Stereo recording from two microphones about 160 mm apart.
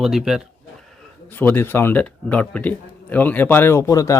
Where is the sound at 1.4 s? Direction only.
10° left (ahead or behind).